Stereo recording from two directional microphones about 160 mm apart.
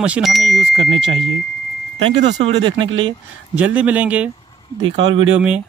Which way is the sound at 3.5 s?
10° right (ahead or behind).